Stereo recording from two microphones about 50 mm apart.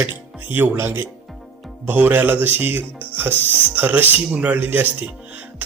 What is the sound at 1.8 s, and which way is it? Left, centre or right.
Speech, right.